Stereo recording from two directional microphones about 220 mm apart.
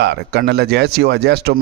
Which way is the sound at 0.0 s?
50° right (ahead or behind).